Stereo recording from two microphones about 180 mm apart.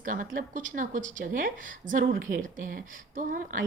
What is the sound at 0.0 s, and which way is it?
A woman's voice, 50° right (ahead or behind).